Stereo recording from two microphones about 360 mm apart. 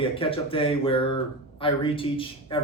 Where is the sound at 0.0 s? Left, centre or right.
Centre.